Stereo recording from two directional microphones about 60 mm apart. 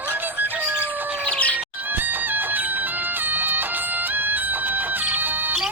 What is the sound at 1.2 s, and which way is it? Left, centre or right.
Music, left.